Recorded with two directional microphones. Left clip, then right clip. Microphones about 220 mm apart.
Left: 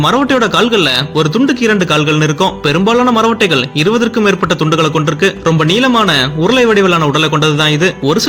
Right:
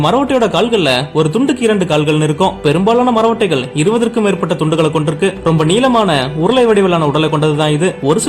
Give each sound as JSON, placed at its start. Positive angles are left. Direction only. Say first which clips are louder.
{"t": 0.0, "sound": "a man's voice", "louder": "left 1 dB", "side_deg": 20}